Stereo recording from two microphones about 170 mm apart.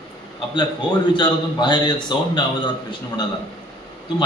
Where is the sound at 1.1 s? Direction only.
25° left (ahead or behind).